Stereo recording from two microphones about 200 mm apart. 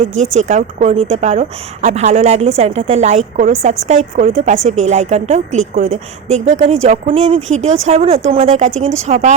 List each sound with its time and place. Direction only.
0.0 s a woman's voice: 35° right (ahead or behind)